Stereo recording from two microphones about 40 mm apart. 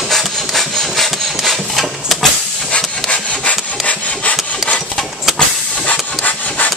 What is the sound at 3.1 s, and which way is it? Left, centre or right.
Wood, left.